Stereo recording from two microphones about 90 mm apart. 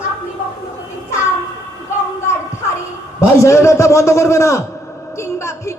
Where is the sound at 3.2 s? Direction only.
30° left (ahead or behind).